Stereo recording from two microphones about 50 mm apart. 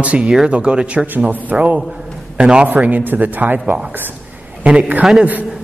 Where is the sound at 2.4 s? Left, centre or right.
Centre.